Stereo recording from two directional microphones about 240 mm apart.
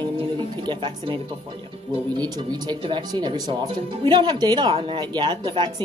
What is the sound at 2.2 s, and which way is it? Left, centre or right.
A woman's voice, centre.